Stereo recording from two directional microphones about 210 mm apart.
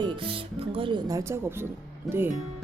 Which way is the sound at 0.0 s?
25° right (ahead or behind).